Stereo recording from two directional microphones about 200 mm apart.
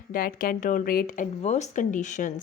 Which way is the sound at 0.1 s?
45° left (ahead or behind).